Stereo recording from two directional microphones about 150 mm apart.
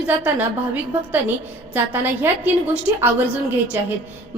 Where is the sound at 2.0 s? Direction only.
15° right (ahead or behind).